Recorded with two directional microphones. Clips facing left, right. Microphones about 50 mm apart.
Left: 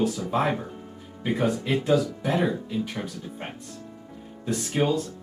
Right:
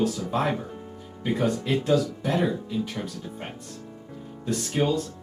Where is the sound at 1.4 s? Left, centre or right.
Centre.